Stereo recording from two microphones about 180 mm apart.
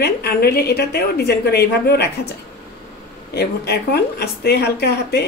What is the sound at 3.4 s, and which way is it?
A woman's voice, 65° left (ahead or behind).